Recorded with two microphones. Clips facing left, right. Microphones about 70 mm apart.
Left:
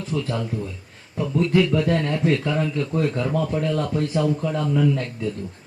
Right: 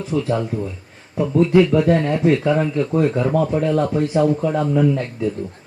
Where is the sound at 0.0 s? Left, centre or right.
Centre.